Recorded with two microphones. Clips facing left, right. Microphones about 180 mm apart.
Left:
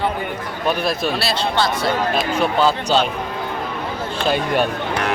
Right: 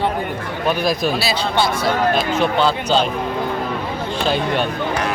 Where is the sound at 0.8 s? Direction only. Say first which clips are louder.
Right 2 dB; centre (ahead or behind).